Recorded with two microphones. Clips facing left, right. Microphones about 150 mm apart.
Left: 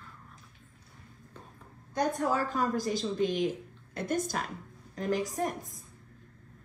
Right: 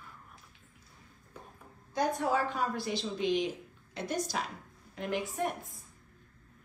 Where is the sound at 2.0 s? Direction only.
45° left (ahead or behind).